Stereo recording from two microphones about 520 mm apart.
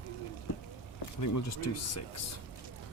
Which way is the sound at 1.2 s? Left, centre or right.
Left.